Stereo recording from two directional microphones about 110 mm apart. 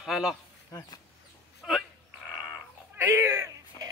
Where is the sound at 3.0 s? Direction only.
20° right (ahead or behind).